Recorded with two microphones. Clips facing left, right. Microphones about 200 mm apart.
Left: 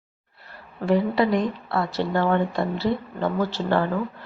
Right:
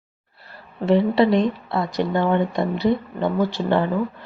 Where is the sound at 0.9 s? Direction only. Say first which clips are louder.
Right 4 dB; 25° right (ahead or behind).